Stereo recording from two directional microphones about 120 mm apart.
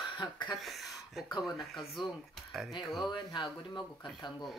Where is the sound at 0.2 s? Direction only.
40° left (ahead or behind).